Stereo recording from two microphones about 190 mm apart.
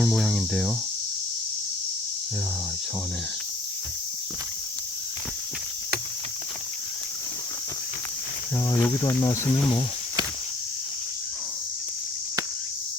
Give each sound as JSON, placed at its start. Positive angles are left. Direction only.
{"t": 0.0, "sound": "cricket", "side_deg": 0}
{"t": 8.7, "sound": "speech", "side_deg": 20}